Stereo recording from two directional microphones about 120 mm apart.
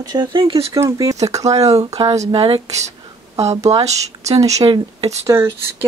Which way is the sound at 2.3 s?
45° right (ahead or behind).